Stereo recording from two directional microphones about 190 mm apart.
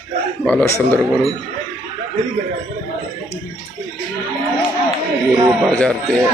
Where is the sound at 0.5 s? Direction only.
15° left (ahead or behind).